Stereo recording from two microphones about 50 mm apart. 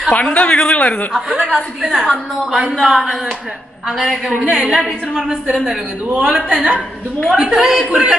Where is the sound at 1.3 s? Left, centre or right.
Right.